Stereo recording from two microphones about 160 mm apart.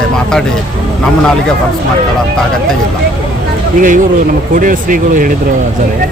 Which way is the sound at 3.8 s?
55° right (ahead or behind).